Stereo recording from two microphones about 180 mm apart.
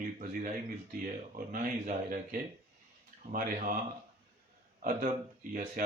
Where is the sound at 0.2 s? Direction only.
50° right (ahead or behind).